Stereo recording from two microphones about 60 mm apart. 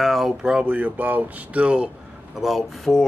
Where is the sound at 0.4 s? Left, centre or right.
Centre.